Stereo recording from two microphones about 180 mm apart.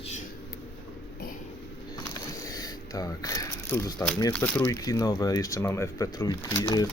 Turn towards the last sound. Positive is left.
turn(degrees=20)  # may be behind; listen again after turning